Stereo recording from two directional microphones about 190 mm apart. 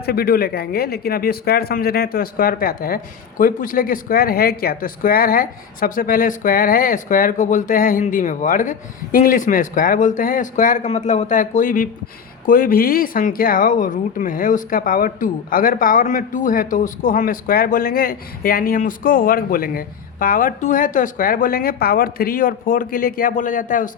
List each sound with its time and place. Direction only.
0.0 s speech: 55° left (ahead or behind)